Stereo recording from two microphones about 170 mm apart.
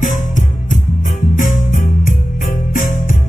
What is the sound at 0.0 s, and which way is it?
Music, 45° left (ahead or behind).